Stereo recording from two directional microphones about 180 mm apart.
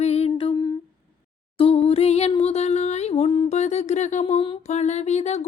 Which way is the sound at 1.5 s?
30° left (ahead or behind).